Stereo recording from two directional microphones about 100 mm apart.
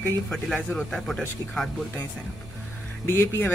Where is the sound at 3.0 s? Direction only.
25° left (ahead or behind).